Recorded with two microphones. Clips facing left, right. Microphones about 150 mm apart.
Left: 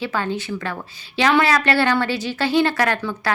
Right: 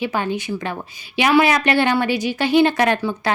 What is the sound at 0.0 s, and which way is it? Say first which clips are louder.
Speech: right 2 dB; 15° right (ahead or behind).